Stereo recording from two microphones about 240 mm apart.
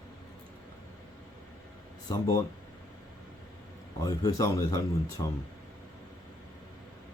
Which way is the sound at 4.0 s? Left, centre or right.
Centre.